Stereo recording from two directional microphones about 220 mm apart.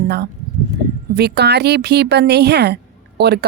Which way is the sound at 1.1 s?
50° right (ahead or behind).